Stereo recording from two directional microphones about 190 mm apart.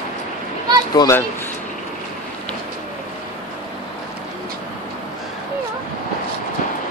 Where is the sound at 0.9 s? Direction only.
20° left (ahead or behind).